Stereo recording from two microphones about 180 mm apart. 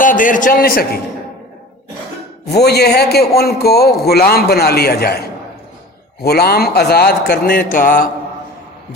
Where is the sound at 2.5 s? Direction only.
65° left (ahead or behind).